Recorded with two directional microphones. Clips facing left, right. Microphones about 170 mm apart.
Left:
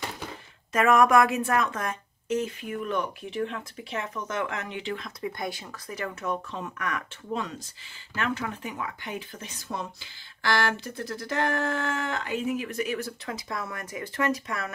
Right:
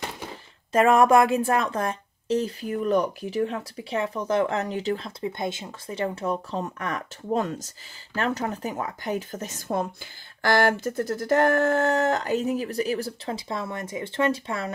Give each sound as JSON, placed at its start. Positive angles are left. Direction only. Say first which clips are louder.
{"t": 0.7, "sound": "speech", "louder": "right 3 dB", "side_deg": -30}